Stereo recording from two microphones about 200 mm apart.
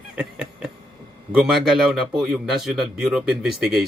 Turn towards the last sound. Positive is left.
turn(degrees=0)  # may be behind; listen again after turning